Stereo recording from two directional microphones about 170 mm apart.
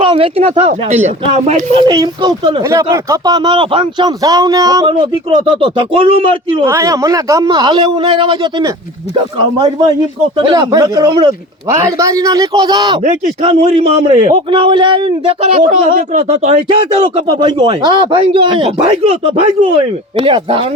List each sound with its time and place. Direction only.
0.0 s speech: 35° right (ahead or behind)
1.9 s speech: 25° right (ahead or behind)
2.6 s speech: 20° right (ahead or behind)
6.7 s speech: 20° right (ahead or behind)
11.8 s speech: 20° right (ahead or behind)
13.0 s speech: 40° right (ahead or behind)
14.5 s speech: 30° right (ahead or behind)